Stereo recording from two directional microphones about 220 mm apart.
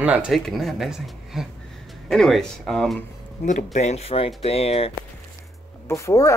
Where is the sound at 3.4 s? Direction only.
30° left (ahead or behind).